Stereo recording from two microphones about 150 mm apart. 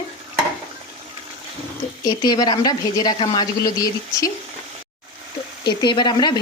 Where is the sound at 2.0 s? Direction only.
25° left (ahead or behind).